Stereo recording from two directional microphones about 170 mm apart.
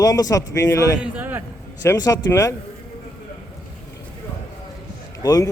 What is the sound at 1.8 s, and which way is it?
Speech, 20° left (ahead or behind).